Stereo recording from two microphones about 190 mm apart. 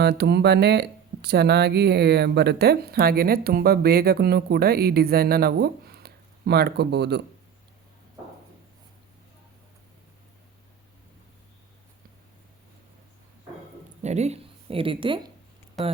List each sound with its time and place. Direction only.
0.0 s speech: 60° right (ahead or behind)
14.0 s speech: 35° right (ahead or behind)